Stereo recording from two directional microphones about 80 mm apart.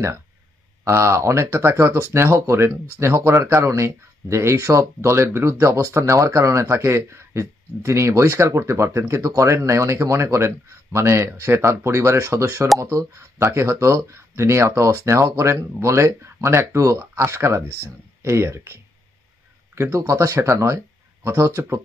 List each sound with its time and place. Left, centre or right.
0.8 s speech: right